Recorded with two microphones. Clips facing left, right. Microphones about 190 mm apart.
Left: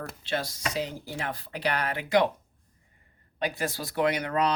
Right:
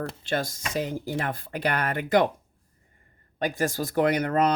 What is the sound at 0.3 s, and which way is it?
Speech, 50° right (ahead or behind).